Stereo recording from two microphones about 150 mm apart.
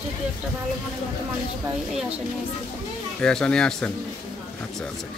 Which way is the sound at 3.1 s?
5° left (ahead or behind).